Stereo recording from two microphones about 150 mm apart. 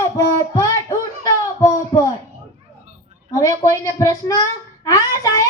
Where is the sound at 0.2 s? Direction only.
20° left (ahead or behind).